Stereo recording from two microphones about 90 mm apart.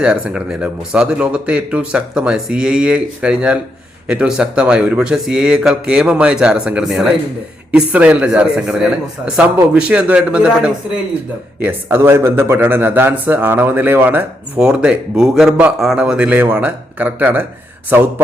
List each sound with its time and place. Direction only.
0.0 s speech: 10° right (ahead or behind)
7.7 s speech: 15° right (ahead or behind)
11.6 s a man's voice: 25° right (ahead or behind)
14.6 s a man's voice: 10° right (ahead or behind)